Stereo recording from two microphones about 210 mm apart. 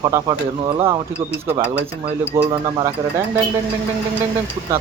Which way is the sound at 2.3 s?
15° right (ahead or behind).